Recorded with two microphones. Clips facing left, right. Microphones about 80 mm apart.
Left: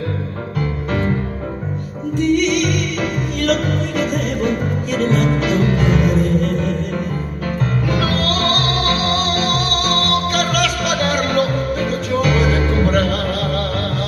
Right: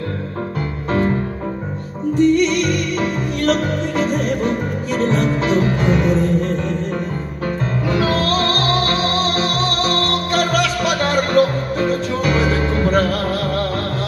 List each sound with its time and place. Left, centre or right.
2.1 s music: right
7.9 s music: right